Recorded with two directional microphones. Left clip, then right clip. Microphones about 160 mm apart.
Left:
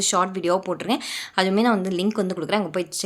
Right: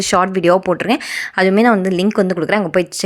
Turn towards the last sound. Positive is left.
turn(degrees=-40)  # may be behind; listen again after turning